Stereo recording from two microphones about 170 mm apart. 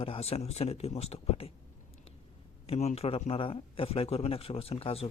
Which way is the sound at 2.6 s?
40° left (ahead or behind).